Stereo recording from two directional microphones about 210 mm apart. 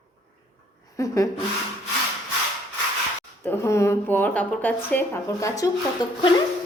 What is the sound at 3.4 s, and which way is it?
Speech, 10° left (ahead or behind).